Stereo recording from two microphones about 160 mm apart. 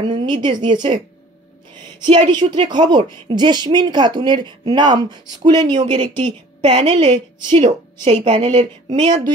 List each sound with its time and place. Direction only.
0.0 s a woman's voice: 30° right (ahead or behind)
8.0 s a woman's voice: 45° right (ahead or behind); by 9.3 s 25° right (ahead or behind)